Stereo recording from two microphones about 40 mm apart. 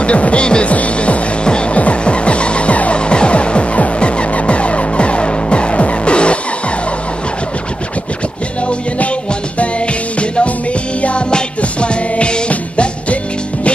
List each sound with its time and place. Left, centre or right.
0.0 s music: left
11.0 s music: left